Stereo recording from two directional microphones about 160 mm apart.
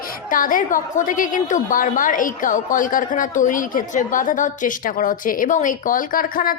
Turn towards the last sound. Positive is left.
turn(degrees=60)  # may be behind; listen again after turning